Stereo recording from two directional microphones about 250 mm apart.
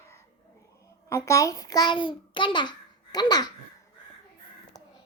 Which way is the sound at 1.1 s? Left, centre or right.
Centre.